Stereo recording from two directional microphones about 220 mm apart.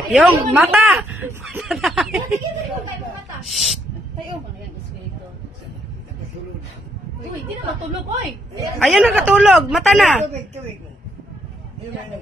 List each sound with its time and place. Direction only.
0.1 s speech: centre (ahead or behind)
3.4 s speech: centre (ahead or behind)
8.7 s speech: centre (ahead or behind)
10.2 s speech: 30° right (ahead or behind)